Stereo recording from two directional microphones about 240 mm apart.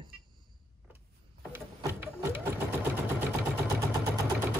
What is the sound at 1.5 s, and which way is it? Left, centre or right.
Sewing machine, centre.